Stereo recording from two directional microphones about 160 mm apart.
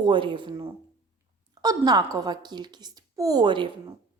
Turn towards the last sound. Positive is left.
turn(degrees=-30)  # may be behind; listen again after turning